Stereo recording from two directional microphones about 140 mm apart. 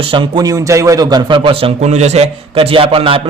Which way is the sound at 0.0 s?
35° right (ahead or behind).